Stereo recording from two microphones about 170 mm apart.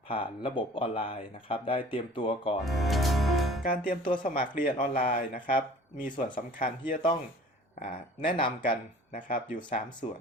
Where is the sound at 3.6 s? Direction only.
55° left (ahead or behind).